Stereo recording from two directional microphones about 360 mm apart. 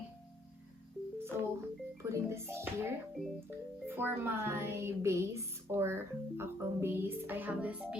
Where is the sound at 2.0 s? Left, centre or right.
Centre.